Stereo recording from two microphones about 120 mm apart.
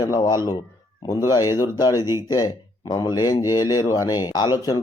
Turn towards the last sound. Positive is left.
turn(degrees=35)  # may be behind; listen again after turning